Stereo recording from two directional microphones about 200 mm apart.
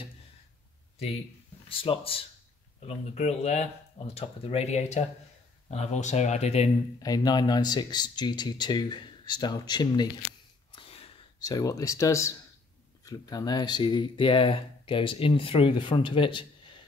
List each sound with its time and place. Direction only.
1.7 s speech: 25° left (ahead or behind)
7.0 s speech: 20° left (ahead or behind)
10.7 s a sound: 30° left (ahead or behind)
13.0 s speech: 20° left (ahead or behind)